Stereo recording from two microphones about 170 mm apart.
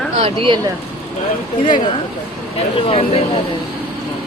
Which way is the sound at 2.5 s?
35° left (ahead or behind).